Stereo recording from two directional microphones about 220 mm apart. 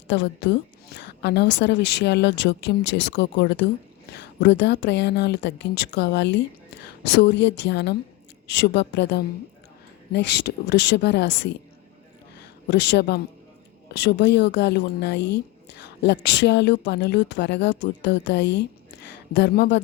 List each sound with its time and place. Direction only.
0.1 s a woman's voice: 50° left (ahead or behind)
12.7 s a woman's voice: 50° left (ahead or behind)